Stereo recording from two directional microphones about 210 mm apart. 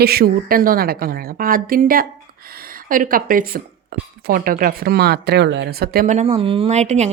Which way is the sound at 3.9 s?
55° right (ahead or behind).